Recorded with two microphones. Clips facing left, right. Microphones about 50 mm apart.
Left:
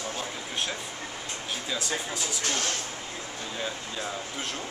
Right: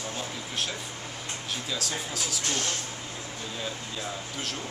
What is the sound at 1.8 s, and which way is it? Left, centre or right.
Speech, right.